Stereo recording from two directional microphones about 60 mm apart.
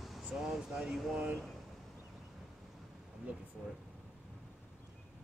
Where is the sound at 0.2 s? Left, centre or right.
Centre.